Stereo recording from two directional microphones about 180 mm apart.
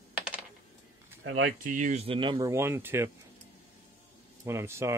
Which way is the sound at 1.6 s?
45° right (ahead or behind).